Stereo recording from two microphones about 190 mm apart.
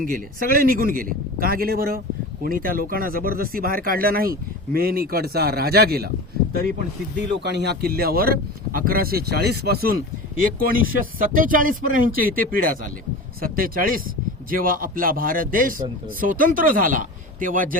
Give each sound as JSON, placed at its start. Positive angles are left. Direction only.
{"t": 0.0, "sound": "speech", "side_deg": -50}
{"t": 7.4, "sound": "speech", "side_deg": -60}